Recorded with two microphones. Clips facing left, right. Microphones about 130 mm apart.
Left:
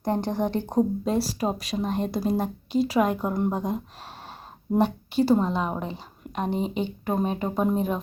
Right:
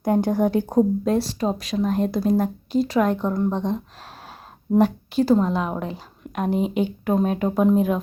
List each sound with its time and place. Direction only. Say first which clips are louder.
0.0 s speech: right 6 dB; 10° right (ahead or behind); by 3.8 s 10° left (ahead or behind)
4.8 s speech: right 3 dB; 5° left (ahead or behind)